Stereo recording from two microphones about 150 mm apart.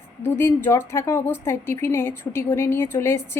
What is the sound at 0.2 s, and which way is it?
A woman's voice, 15° left (ahead or behind).